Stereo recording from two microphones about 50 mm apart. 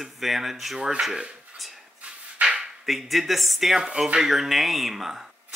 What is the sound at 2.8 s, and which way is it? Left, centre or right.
Speech, centre.